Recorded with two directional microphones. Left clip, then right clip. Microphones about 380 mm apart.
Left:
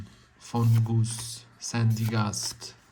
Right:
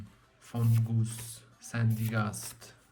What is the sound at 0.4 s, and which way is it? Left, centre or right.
Speech, centre.